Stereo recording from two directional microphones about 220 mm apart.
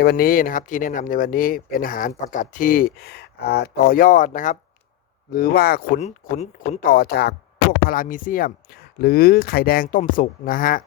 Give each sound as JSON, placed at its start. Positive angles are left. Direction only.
{"t": 0.0, "sound": "speech", "side_deg": 45}
{"t": 6.0, "sound": "speech", "side_deg": 30}